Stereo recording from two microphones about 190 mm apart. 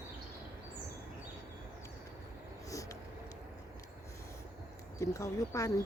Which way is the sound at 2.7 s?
15° left (ahead or behind).